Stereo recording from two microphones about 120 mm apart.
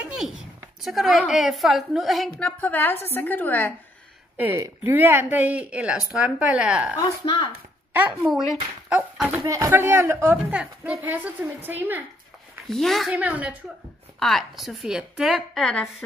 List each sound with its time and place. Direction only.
0.8 s a woman's voice: centre (ahead or behind)
2.4 s a woman's voice: 15° left (ahead or behind)
4.6 s a man's voice: 30° right (ahead or behind)
4.9 s speech: 15° right (ahead or behind)
7.2 s speech: 45° left (ahead or behind)
7.9 s a woman's voice: 15° right (ahead or behind)
9.5 s a man's voice: 25° right (ahead or behind)
10.3 s speech: 10° right (ahead or behind)
12.6 s a woman's voice: centre (ahead or behind)
13.1 s speech: 10° right (ahead or behind)
14.2 s a woman's voice: centre (ahead or behind)